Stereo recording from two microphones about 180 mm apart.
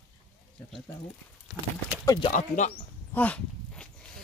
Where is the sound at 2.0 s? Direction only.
20° left (ahead or behind).